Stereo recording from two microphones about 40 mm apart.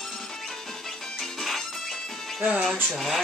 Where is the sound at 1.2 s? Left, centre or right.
Centre.